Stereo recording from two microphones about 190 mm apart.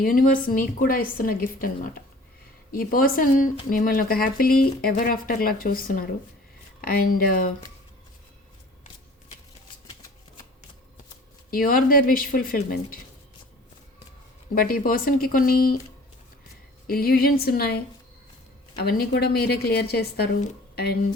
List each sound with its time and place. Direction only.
0.0 s speech: 45° left (ahead or behind)
11.5 s speech: 50° left (ahead or behind)
14.5 s speech: 50° left (ahead or behind)
16.8 s a woman's voice: 50° left (ahead or behind)
18.8 s a woman's voice: 55° left (ahead or behind)